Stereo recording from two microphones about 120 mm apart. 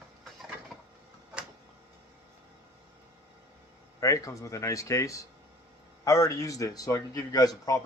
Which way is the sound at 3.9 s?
25° left (ahead or behind).